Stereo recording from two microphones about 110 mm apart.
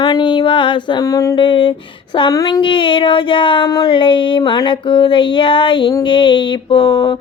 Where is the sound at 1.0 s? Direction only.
30° left (ahead or behind).